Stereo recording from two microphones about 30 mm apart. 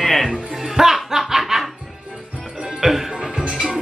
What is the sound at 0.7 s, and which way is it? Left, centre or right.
Music, centre.